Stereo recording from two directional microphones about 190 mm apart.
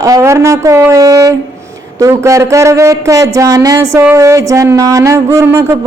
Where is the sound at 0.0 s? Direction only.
15° right (ahead or behind).